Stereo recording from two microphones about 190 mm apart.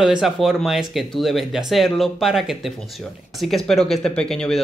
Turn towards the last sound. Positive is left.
turn(degrees=5)  # may be behind; listen again after turning